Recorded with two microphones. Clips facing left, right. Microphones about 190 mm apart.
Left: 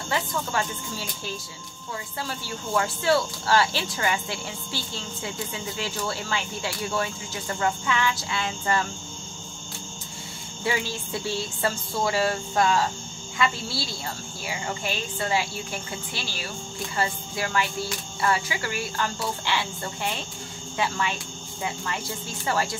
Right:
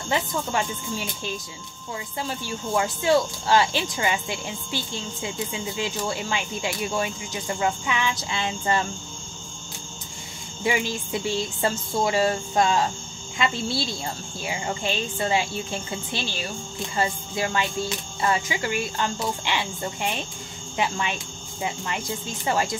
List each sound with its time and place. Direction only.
0.1 s speech: 20° right (ahead or behind)
10.6 s speech: 15° right (ahead or behind)